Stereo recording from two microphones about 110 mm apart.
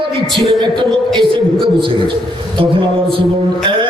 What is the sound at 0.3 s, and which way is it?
Music, 45° right (ahead or behind).